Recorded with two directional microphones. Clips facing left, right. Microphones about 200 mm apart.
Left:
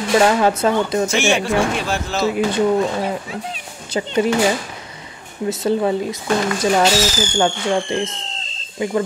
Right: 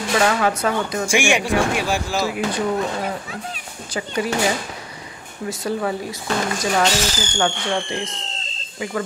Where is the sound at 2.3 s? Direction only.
30° left (ahead or behind).